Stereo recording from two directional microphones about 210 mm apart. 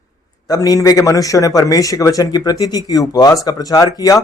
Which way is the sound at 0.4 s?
15° left (ahead or behind).